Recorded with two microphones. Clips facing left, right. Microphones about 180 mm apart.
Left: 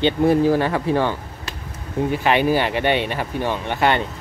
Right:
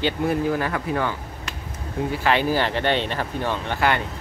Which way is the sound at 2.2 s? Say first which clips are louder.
Left 2 dB; 15° left (ahead or behind).